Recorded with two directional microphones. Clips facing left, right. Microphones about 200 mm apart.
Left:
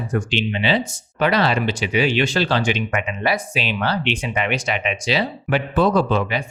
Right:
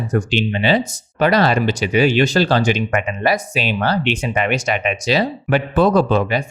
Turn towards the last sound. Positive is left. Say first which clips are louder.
# right 3 dB
turn(degrees=-40)  # may be behind; listen again after turning